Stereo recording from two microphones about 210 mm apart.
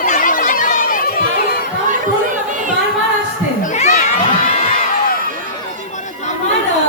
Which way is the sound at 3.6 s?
35° left (ahead or behind).